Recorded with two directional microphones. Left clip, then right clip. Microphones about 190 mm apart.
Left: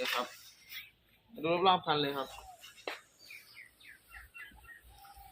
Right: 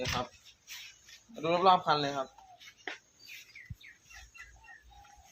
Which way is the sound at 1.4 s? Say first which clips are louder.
Right 3 dB; 55° right (ahead or behind).